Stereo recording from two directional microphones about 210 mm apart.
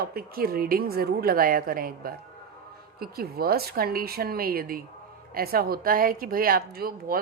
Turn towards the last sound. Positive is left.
turn(degrees=-45)  # may be behind; listen again after turning